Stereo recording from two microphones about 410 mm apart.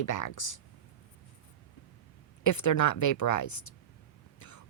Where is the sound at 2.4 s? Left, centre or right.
Left.